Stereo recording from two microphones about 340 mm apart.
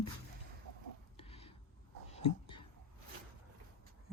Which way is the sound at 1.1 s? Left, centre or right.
Centre.